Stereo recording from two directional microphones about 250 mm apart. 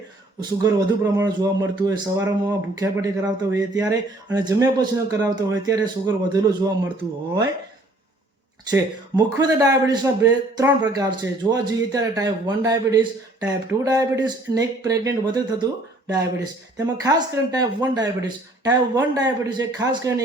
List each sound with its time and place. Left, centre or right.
1.1 s a man's voice: centre
8.7 s a man's voice: centre